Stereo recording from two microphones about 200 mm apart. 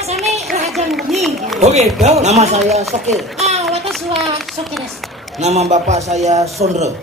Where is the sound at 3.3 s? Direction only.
35° right (ahead or behind).